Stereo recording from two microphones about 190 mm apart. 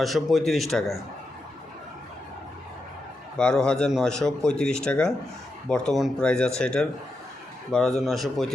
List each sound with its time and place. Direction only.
0.0 s speech: centre (ahead or behind)
3.3 s speech: 5° left (ahead or behind)